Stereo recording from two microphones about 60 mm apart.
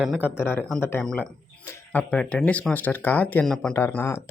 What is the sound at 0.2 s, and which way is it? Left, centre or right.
Speech, left.